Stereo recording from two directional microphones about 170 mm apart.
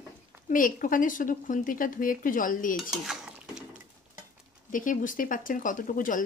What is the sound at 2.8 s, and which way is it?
Dishes, 5° right (ahead or behind).